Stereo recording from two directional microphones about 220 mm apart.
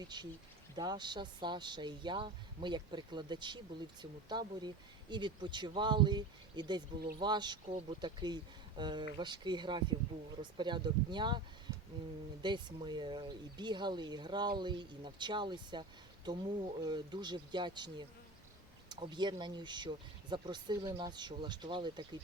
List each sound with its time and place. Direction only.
0.0 s speech: 20° right (ahead or behind)
12.4 s speech: 20° right (ahead or behind)